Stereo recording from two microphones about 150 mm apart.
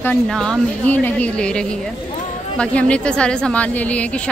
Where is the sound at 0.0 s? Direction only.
5° left (ahead or behind).